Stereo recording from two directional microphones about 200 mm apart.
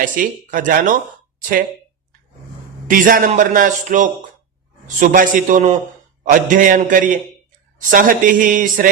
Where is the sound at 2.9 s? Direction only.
40° right (ahead or behind).